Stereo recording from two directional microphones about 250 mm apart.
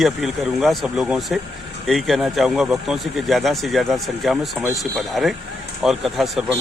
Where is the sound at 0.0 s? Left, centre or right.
Centre.